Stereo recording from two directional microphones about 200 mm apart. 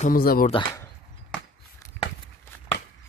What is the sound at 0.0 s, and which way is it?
Speech, 45° left (ahead or behind).